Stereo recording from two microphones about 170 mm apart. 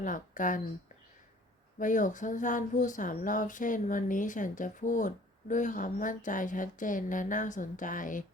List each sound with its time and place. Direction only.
0.0 s speech: 50° left (ahead or behind)
1.8 s speech: 50° left (ahead or behind)